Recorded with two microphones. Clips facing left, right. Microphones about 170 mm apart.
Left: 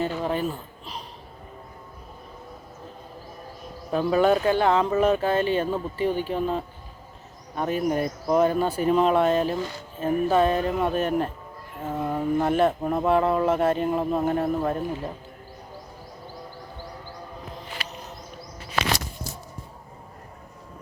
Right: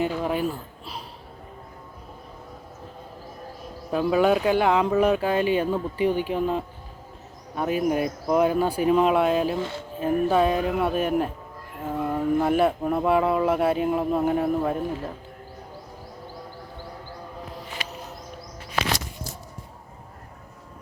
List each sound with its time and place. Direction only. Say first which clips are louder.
0.1 s a man's voice: right 1 dB; 10° right (ahead or behind)
3.9 s a man's voice: even; 5° right (ahead or behind)
9.6 s music: right 2 dB; 25° right (ahead or behind)
10.0 s a man's voice: even; 10° right (ahead or behind)